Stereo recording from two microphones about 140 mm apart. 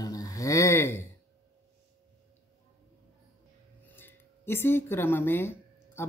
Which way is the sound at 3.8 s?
15° left (ahead or behind).